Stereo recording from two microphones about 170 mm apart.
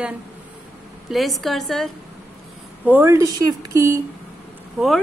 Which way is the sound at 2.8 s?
10° right (ahead or behind).